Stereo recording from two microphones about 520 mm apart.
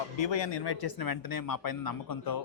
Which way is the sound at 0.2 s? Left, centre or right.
Left.